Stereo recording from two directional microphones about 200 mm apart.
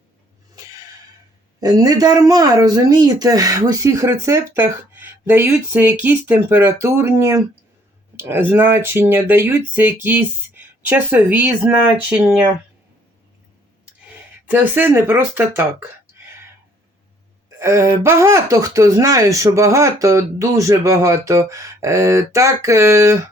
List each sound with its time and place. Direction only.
1.6 s speech: 20° right (ahead or behind)
14.4 s speech: 10° right (ahead or behind)
17.6 s speech: 15° right (ahead or behind)